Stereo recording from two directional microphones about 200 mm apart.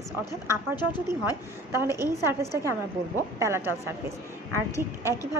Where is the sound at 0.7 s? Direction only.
20° left (ahead or behind).